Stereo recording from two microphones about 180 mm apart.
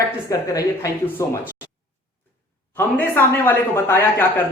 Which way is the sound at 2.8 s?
10° left (ahead or behind).